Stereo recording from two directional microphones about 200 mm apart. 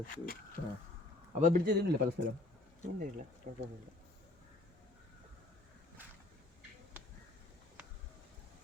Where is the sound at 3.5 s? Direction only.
50° right (ahead or behind).